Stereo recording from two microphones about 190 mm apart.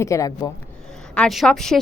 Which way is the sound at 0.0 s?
15° left (ahead or behind).